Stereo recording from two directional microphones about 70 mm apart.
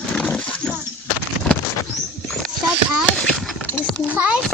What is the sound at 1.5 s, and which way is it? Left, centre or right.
Bird, left.